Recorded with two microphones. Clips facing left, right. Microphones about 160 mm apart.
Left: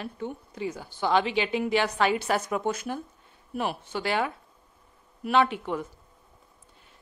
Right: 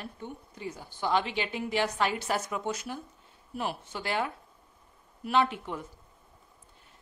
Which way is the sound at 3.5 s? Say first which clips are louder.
Left 4 dB; 75° left (ahead or behind).